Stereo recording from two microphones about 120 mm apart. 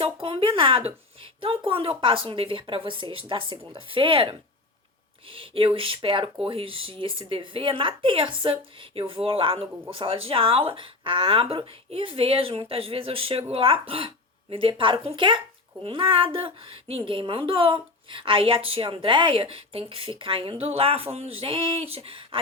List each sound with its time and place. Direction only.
0.0 s a woman's voice: 50° right (ahead or behind)